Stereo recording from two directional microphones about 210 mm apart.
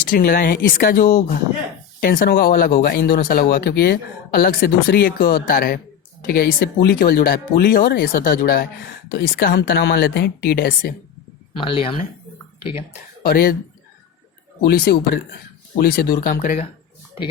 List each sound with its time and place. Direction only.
0.1 s speech: 40° left (ahead or behind)
11.5 s speech: 25° left (ahead or behind)
13.2 s speech: 45° left (ahead or behind)
14.6 s speech: 45° left (ahead or behind)